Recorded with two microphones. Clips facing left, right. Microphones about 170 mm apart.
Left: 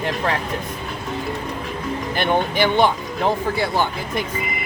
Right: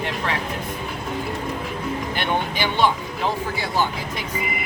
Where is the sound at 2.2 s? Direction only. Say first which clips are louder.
Left 7 dB; 50° left (ahead or behind).